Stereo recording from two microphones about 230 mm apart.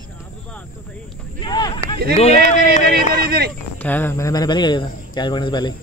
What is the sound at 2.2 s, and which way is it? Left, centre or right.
Speech, left.